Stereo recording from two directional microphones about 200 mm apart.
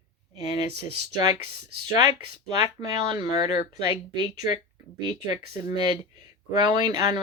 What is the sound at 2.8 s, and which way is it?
Speech, 20° right (ahead or behind).